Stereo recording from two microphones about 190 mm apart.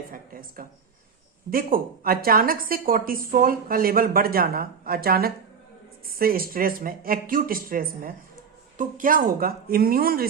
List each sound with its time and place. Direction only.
0.1 s a woman's voice: 45° right (ahead or behind)